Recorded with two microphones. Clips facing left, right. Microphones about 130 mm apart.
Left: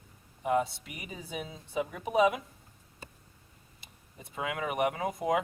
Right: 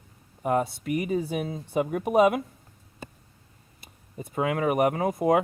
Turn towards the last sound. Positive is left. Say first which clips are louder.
# right 7 dB
turn(degrees=-50)  # may be behind; listen again after turning